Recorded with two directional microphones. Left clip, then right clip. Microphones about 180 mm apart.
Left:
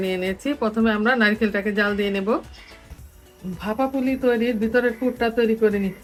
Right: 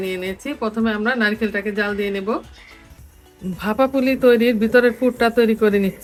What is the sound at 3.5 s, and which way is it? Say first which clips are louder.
Speech: right 5 dB; 80° right.